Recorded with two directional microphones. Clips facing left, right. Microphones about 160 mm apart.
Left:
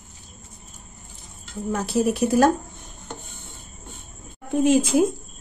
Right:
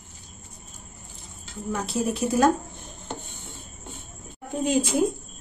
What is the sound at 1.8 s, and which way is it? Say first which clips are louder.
Speech: left 5 dB; 65° left (ahead or behind).